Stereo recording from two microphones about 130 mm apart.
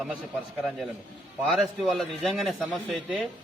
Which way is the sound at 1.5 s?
Centre (ahead or behind).